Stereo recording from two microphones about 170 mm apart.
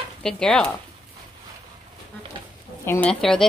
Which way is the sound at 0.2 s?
5° left (ahead or behind).